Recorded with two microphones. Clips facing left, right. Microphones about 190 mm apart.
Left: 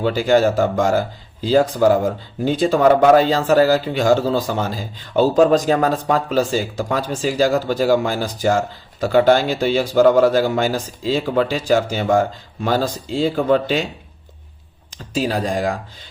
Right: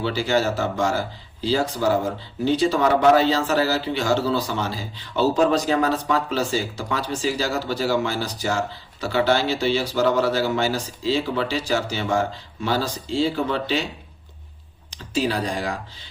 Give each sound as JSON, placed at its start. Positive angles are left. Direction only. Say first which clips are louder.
{"t": 0.0, "sound": "speech", "louder": "left 6 dB", "side_deg": 50}
{"t": 15.1, "sound": "speech", "louder": "left 3 dB", "side_deg": 45}